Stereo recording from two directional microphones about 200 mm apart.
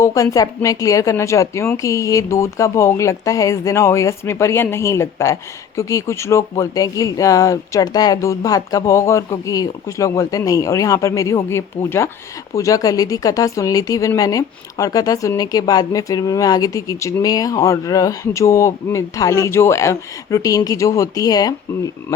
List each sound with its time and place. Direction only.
0.0 s a woman's voice: 15° left (ahead or behind)